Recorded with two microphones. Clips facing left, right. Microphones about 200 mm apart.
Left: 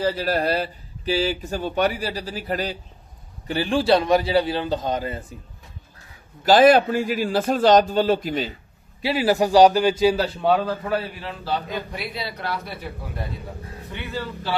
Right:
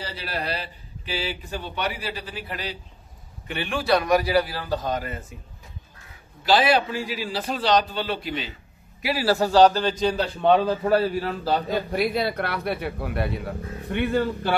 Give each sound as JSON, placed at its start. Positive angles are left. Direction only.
{"t": 0.0, "sound": "a man's voice", "side_deg": 50}
{"t": 6.4, "sound": "a man's voice", "side_deg": 45}
{"t": 9.0, "sound": "a man's voice", "side_deg": 20}
{"t": 10.9, "sound": "a man's voice", "side_deg": -40}
{"t": 13.8, "sound": "a man's voice", "side_deg": -55}